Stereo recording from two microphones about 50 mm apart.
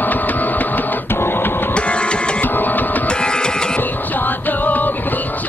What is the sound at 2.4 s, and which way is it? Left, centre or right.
Music, left.